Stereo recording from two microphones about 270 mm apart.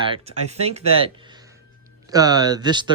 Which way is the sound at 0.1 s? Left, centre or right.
Right.